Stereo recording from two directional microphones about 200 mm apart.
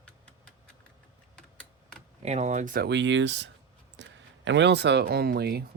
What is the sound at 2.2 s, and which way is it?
Speech, 35° right (ahead or behind).